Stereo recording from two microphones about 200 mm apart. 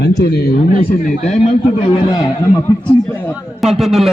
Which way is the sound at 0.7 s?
40° left (ahead or behind).